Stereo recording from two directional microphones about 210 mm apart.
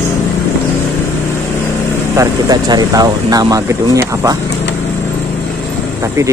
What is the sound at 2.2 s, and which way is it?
Speech, 20° right (ahead or behind).